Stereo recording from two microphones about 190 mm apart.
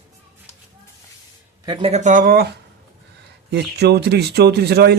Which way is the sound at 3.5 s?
60° right (ahead or behind).